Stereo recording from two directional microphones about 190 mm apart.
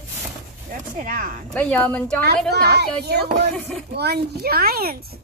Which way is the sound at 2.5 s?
60° right (ahead or behind).